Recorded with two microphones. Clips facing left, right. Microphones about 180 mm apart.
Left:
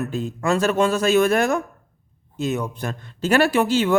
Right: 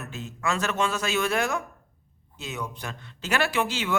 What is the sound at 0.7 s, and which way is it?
A man's voice, 45° left (ahead or behind).